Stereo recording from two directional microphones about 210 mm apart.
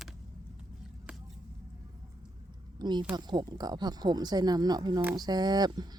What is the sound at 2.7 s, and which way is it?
A woman's voice, 20° right (ahead or behind).